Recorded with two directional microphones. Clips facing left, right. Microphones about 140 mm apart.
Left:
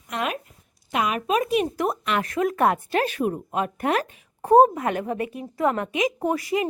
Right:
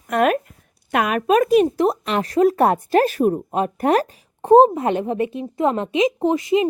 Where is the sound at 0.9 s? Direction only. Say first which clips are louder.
Right 6 dB; 60° right (ahead or behind).